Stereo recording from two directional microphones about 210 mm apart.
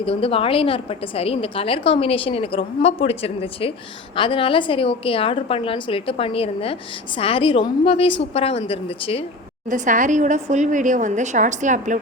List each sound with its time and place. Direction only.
0.0 s a woman's voice: 25° left (ahead or behind)
9.6 s a woman's voice: 35° right (ahead or behind)